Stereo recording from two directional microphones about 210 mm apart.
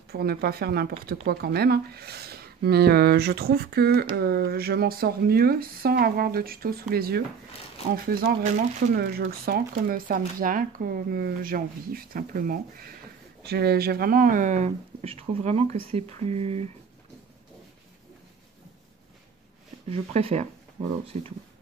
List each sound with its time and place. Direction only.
0.1 s speech: 45° right (ahead or behind); by 16.6 s 30° right (ahead or behind)
20.1 s speech: 30° right (ahead or behind)